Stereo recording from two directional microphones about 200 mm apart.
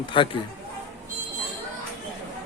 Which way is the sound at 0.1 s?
25° left (ahead or behind).